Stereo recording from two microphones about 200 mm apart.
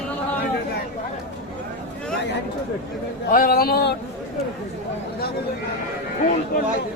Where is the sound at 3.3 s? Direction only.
45° left (ahead or behind).